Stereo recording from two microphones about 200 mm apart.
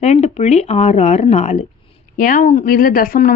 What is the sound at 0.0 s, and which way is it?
A woman's voice, 35° left (ahead or behind).